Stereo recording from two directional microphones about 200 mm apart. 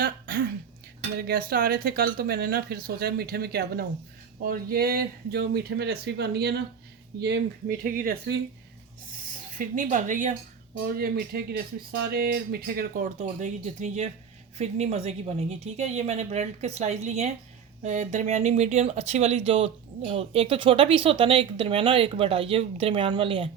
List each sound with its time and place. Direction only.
0.0 s speech: 50° right (ahead or behind)
9.6 s speech: 40° right (ahead or behind)
10.8 s speech: 50° right (ahead or behind); by 23.5 s 25° right (ahead or behind)